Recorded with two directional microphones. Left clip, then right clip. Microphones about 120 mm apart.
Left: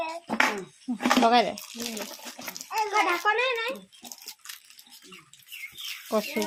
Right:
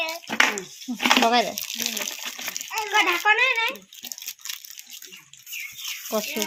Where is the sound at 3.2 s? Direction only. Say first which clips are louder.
Right 5 dB; 80° left.